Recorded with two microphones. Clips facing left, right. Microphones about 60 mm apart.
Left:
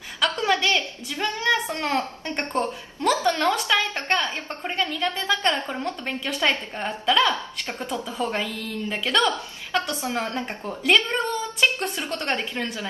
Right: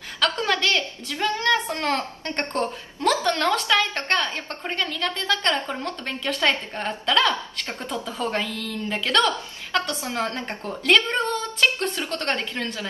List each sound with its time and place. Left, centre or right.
0.2 s a woman's voice: centre
10.0 s a woman's voice: left